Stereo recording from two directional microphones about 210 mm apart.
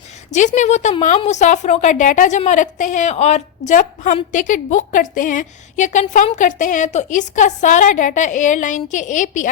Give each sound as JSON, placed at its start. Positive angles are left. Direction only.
{"t": 0.3, "sound": "a woman's voice", "side_deg": 35}